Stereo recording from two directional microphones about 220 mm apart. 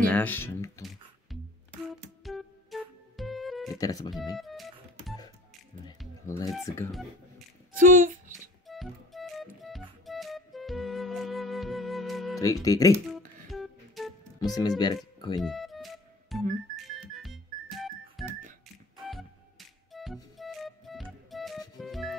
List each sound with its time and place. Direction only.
0.1 s speech: 10° left (ahead or behind)
0.8 s music: centre (ahead or behind)
3.7 s speech: 15° left (ahead or behind)
4.4 s music: centre (ahead or behind)
6.2 s speech: 15° left (ahead or behind)
6.9 s telephone dialing: centre (ahead or behind)
7.7 s speech: 40° right (ahead or behind)
8.6 s music: centre (ahead or behind)
12.4 s speech: 15° left (ahead or behind)
13.5 s music: centre (ahead or behind)
14.4 s speech: 15° left (ahead or behind)
15.4 s music: centre (ahead or behind)
19.0 s flute: centre (ahead or behind)
20.3 s music: centre (ahead or behind)